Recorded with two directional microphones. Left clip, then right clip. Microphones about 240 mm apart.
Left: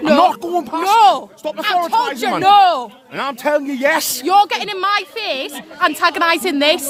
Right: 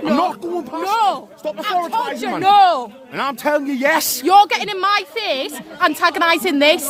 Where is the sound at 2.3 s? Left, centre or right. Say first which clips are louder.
Left 2 dB; left.